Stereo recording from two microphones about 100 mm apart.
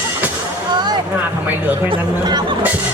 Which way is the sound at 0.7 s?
45° right (ahead or behind).